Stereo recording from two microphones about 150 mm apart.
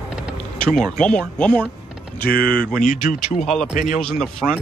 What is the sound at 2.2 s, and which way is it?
A man's voice, 80° left.